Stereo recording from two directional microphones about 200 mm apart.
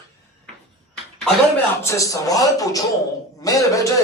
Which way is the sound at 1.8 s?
15° left (ahead or behind).